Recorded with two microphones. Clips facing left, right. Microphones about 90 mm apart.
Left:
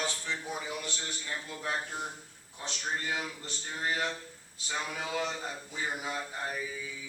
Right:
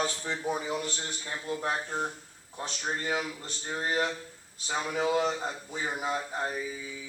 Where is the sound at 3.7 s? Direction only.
35° right (ahead or behind).